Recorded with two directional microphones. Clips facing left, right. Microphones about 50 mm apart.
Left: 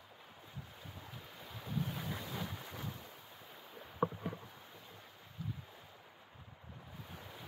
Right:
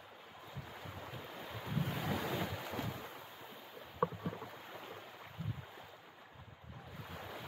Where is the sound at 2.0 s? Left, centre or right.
Right.